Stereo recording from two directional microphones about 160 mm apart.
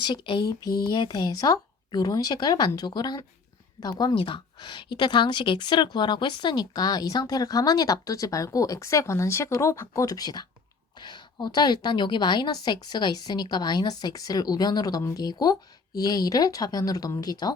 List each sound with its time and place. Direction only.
0.0 s a woman's voice: 30° left (ahead or behind)